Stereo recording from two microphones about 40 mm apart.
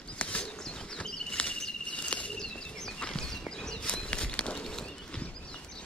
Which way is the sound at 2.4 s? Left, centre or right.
Centre.